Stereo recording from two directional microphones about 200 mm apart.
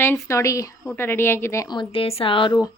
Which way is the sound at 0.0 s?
10° left (ahead or behind).